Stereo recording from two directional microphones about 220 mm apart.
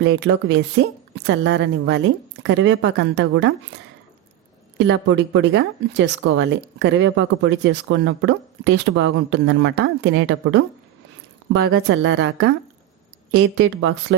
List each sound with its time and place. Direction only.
0.0 s a woman's voice: 55° right (ahead or behind)
4.8 s speech: 55° right (ahead or behind)